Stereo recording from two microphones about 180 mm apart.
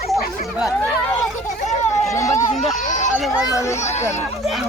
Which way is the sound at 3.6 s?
15° left (ahead or behind).